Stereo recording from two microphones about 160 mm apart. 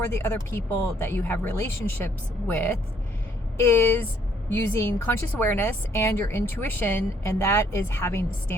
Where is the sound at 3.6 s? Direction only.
15° left (ahead or behind).